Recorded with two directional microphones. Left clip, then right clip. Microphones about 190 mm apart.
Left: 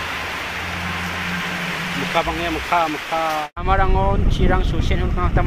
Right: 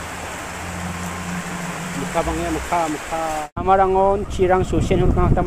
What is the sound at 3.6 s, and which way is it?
Speech, 50° right (ahead or behind).